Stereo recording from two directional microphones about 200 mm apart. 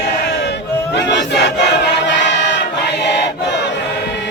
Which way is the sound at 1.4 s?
60° left (ahead or behind).